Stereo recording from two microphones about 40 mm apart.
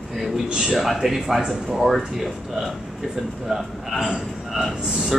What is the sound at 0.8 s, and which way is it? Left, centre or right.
Speech, centre.